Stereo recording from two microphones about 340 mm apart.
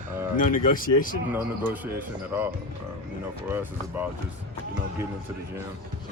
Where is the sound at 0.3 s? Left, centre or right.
Left.